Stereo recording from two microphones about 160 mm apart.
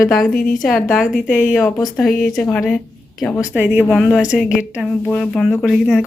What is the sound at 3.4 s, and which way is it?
Speech, 10° right (ahead or behind).